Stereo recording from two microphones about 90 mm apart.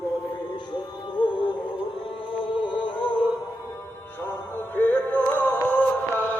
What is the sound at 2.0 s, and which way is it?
Music, 70° left (ahead or behind).